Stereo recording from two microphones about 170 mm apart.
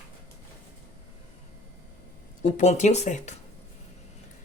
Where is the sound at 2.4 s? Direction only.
45° left (ahead or behind).